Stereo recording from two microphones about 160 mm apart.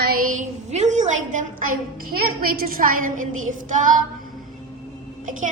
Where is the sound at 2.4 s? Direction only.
65° right (ahead or behind).